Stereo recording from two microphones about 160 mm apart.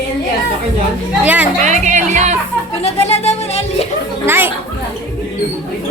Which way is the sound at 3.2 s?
40° left (ahead or behind).